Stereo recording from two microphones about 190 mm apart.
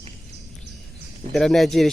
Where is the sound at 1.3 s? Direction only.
Centre (ahead or behind).